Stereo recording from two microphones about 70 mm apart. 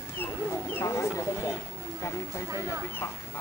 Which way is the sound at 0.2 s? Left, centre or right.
Left.